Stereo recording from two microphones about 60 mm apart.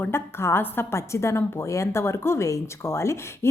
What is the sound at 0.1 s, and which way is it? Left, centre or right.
A woman's voice, left.